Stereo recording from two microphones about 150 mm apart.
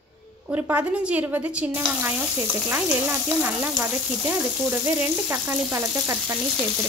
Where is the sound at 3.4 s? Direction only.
10° right (ahead or behind).